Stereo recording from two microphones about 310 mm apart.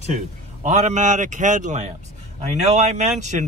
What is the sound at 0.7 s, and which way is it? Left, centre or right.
A man's voice, right.